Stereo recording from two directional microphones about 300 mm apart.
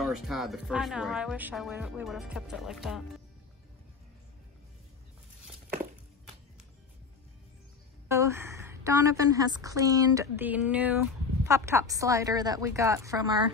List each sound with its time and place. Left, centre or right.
0.0 s speech: centre
8.1 s a woman's voice: centre